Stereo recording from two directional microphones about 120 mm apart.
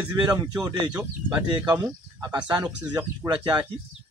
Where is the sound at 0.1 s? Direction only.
35° right (ahead or behind).